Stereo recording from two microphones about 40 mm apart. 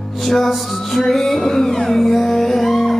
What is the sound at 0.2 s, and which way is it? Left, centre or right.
Music, centre.